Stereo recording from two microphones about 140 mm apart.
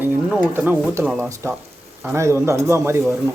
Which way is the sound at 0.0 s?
10° right (ahead or behind).